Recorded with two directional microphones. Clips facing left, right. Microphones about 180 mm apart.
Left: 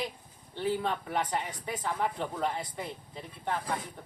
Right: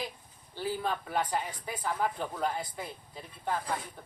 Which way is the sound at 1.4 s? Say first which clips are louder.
Left 2 dB; 25° left (ahead or behind).